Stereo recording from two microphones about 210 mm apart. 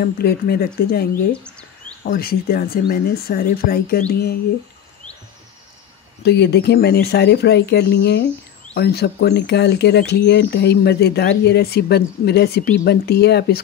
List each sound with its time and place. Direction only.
0.0 s speech: 45° left (ahead or behind)
1.3 s chirp: 5° left (ahead or behind)
2.0 s speech: 45° left (ahead or behind)
6.2 s speech: 50° left (ahead or behind)